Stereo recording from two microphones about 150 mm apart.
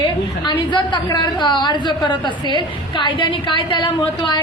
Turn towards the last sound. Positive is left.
turn(degrees=35)  # may be behind; listen again after turning